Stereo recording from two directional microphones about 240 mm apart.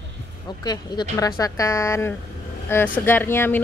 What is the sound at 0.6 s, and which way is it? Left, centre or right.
Speech, centre.